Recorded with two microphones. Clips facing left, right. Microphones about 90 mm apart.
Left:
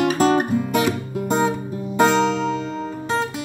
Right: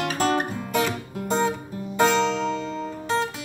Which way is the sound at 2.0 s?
10° left (ahead or behind).